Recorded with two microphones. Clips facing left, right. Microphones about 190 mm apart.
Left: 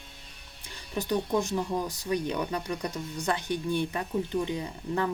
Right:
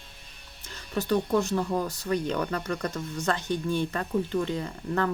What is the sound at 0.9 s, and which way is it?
Speech, 15° left (ahead or behind).